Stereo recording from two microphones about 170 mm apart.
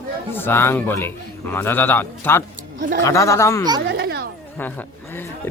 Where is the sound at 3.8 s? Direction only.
90° right.